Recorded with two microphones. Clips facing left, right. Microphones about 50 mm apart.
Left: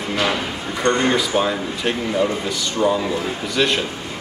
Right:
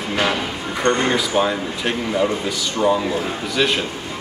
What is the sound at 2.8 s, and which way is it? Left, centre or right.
Speech, centre.